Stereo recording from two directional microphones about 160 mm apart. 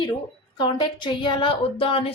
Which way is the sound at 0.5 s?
30° left (ahead or behind).